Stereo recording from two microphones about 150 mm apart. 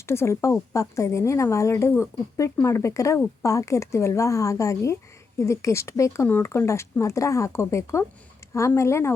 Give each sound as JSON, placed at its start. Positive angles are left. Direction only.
{"t": 0.0, "sound": "a woman's voice", "side_deg": 15}